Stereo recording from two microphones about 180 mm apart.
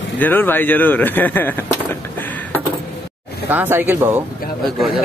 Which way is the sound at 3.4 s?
10° right (ahead or behind).